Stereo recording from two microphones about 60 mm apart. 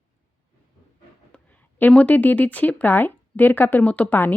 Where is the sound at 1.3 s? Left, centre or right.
Centre.